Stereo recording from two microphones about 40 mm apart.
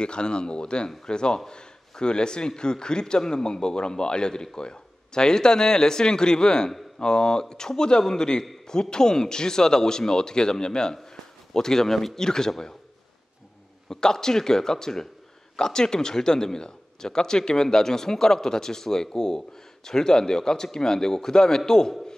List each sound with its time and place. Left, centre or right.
0.0 s a man's voice: left
13.8 s speech: centre